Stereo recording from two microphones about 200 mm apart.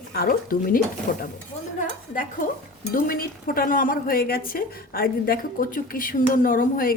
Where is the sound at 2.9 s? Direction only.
45° left (ahead or behind).